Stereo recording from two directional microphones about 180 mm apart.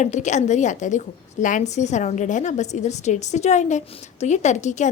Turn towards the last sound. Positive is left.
turn(degrees=40)  # may be behind; listen again after turning